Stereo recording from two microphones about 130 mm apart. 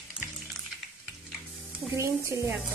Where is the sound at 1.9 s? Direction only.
20° right (ahead or behind).